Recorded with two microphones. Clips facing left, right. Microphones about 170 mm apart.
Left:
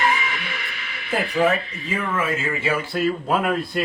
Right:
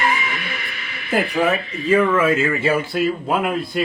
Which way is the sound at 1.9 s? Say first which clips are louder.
Right 9 dB; 90° right.